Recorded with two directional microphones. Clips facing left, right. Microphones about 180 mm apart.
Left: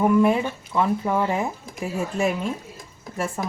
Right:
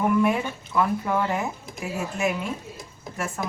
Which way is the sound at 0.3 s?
25° left (ahead or behind).